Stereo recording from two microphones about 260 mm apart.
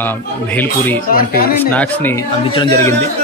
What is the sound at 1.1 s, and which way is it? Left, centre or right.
Speech, left.